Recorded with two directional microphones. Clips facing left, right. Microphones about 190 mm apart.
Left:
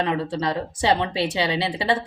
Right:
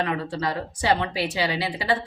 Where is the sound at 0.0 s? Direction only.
25° left (ahead or behind).